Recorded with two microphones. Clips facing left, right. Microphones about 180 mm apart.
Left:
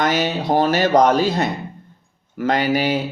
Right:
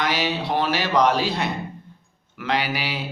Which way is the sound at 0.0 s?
45° left (ahead or behind).